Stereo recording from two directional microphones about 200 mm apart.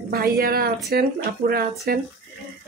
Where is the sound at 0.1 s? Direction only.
50° right (ahead or behind).